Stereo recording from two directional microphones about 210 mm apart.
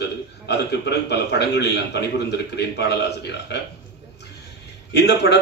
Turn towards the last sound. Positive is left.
turn(degrees=55)  # may be behind; listen again after turning